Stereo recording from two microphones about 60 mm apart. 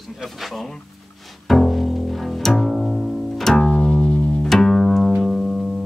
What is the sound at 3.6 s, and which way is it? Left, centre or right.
Music, centre.